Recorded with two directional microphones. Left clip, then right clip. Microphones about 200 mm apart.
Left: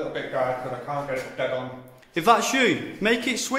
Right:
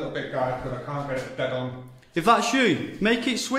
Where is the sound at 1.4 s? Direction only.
20° right (ahead or behind).